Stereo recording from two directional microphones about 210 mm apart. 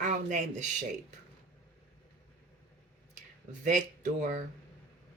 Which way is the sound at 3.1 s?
35° right (ahead or behind).